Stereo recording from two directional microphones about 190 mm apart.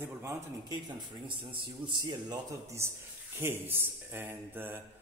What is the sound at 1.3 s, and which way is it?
A man's voice, 25° right (ahead or behind).